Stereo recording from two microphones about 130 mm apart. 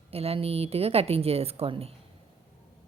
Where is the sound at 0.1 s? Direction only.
50° right (ahead or behind).